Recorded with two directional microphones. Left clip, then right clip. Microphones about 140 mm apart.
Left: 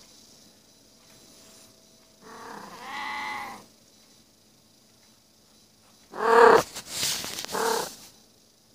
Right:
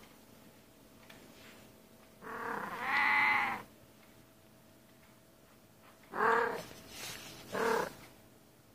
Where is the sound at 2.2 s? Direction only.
20° left (ahead or behind).